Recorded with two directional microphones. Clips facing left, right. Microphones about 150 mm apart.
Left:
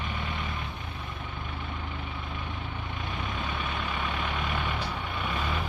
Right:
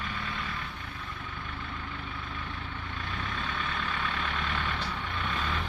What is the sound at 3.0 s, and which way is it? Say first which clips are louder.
Vehicle: left 2 dB; 15° left (ahead or behind).